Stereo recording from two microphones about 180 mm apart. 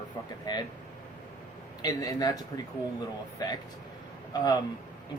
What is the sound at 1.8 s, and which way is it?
Speech, 20° left (ahead or behind).